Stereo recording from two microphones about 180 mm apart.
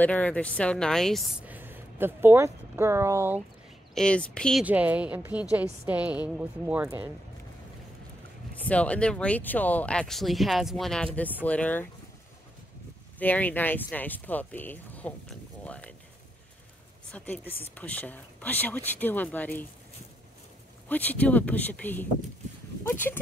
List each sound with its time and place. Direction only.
0.0 s a woman's voice: 10° left (ahead or behind); by 3.4 s 15° right (ahead or behind)
3.9 s speech: 5° left (ahead or behind)
4.6 s a woman's voice: 10° right (ahead or behind)
8.6 s speech: 5° left (ahead or behind)
13.2 s speech: 10° left (ahead or behind)
17.1 s speech: 10° left (ahead or behind)
20.9 s speech: 10° left (ahead or behind)